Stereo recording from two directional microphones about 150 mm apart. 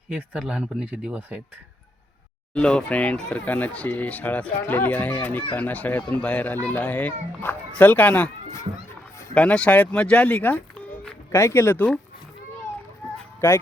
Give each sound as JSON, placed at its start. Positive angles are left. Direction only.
{"t": 0.1, "sound": "speech", "side_deg": -5}
{"t": 2.5, "sound": "speech", "side_deg": 5}
{"t": 9.3, "sound": "speech", "side_deg": 10}
{"t": 13.4, "sound": "speech", "side_deg": 15}